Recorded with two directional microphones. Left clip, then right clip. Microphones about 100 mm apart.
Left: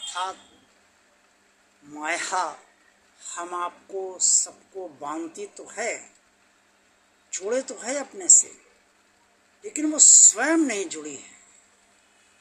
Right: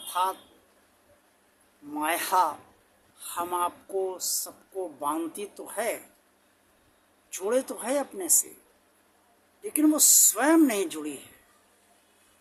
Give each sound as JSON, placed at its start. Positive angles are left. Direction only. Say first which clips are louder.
{"t": 0.1, "sound": "a man's voice", "louder": "right 4 dB", "side_deg": -35}
{"t": 2.0, "sound": "speech", "louder": "right 2 dB", "side_deg": -30}
{"t": 7.4, "sound": "speech", "louder": "even", "side_deg": -35}
{"t": 9.6, "sound": "speech", "louder": "left 3 dB", "side_deg": -35}